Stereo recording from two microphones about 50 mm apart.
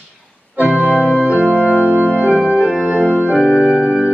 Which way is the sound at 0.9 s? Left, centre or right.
Centre.